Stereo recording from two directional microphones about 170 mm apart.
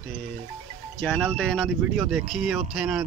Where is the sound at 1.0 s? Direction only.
10° left (ahead or behind).